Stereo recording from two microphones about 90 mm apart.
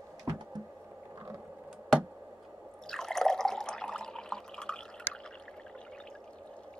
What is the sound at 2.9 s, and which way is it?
Water, 5° left (ahead or behind).